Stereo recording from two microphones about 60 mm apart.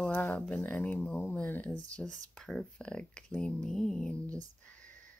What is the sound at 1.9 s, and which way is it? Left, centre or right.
Speech, centre.